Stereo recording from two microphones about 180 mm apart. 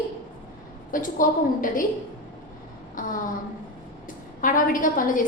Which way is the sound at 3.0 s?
50° left (ahead or behind).